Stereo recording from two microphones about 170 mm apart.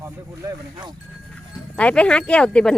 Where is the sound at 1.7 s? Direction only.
5° left (ahead or behind).